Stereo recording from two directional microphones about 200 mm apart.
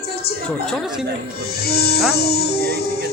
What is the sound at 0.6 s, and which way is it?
Speech, centre (ahead or behind).